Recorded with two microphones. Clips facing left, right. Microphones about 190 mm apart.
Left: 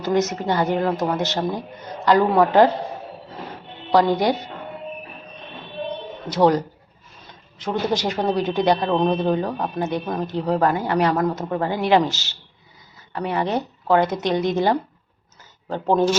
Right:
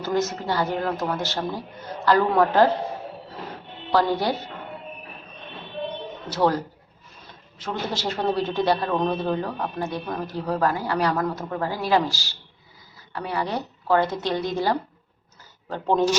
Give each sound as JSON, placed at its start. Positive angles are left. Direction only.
{"t": 0.0, "sound": "a man's voice", "side_deg": 20}
{"t": 3.9, "sound": "a man's voice", "side_deg": 15}
{"t": 6.2, "sound": "a man's voice", "side_deg": 15}
{"t": 7.6, "sound": "a man's voice", "side_deg": 15}